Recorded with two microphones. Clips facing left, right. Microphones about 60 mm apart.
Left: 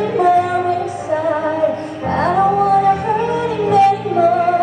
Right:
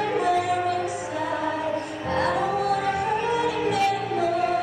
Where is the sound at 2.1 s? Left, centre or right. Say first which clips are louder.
Left 9 dB; left.